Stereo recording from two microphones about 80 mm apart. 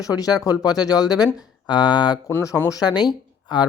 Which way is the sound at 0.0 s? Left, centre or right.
Left.